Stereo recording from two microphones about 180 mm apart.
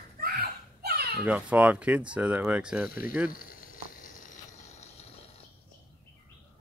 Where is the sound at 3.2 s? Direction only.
50° left (ahead or behind).